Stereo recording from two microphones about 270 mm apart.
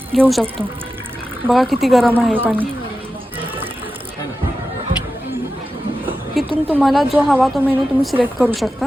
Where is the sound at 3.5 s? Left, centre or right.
Centre.